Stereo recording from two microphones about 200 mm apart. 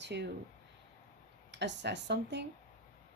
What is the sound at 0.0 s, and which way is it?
Speech, 60° right (ahead or behind).